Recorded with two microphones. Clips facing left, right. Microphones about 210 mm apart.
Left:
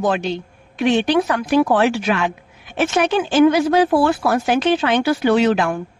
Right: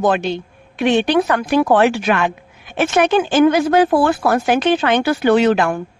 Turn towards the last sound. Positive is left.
turn(degrees=-55)  # may be behind; listen again after turning